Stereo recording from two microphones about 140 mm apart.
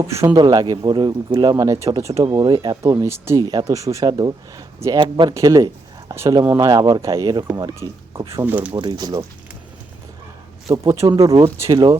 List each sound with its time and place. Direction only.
0.1 s speech: 20° right (ahead or behind)
8.4 s speech: 15° right (ahead or behind)
8.7 s speech: 35° right (ahead or behind)
10.7 s speech: 25° right (ahead or behind)